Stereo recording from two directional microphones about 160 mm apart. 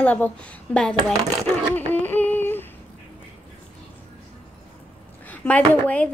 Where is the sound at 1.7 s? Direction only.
10° left (ahead or behind).